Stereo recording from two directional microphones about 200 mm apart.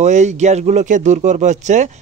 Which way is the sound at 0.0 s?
35° right (ahead or behind).